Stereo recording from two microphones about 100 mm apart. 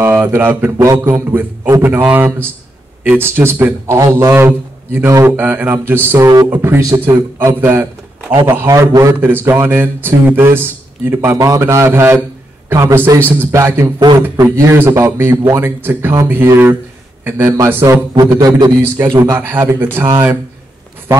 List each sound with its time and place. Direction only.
0.0 s speech: 25° right (ahead or behind)
0.7 s a man's voice: 30° right (ahead or behind)
1.1 s a man's voice: 15° right (ahead or behind)
6.1 s a man's voice: 35° right (ahead or behind)
6.4 s a man's voice: 20° right (ahead or behind)
9.2 s a man's voice: 20° right (ahead or behind)
18.1 s a man's voice: 40° right (ahead or behind)
18.8 s speech: 20° right (ahead or behind)
19.1 s a man's voice: 35° right (ahead or behind)
19.4 s speech: 20° right (ahead or behind)